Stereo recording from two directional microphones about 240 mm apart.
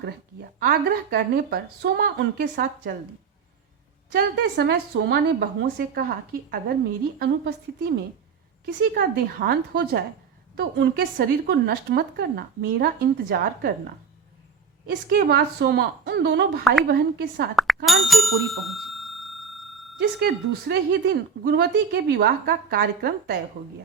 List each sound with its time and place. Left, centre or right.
0.6 s speech: right
4.1 s a woman's voice: right
15.1 s a woman's voice: right
17.5 s speech: centre
17.8 s bicycle bell: centre
20.0 s speech: right